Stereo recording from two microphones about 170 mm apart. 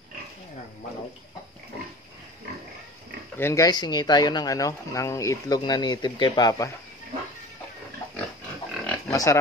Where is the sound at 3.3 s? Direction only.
15° left (ahead or behind).